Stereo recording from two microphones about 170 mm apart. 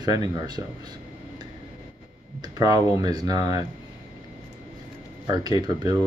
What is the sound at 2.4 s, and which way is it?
Speech, 20° right (ahead or behind).